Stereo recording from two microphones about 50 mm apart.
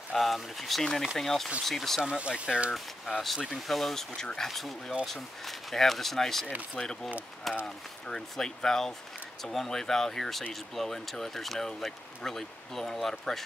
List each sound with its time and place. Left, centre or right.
0.1 s speech: centre
2.1 s speech: right
2.7 s speech: centre